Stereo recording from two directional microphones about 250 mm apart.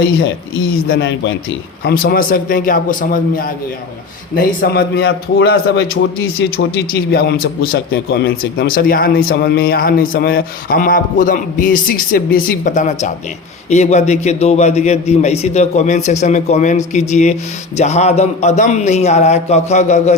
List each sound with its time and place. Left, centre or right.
0.9 s a man's voice: left